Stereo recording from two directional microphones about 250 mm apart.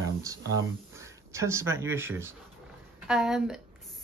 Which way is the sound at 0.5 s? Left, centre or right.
Centre.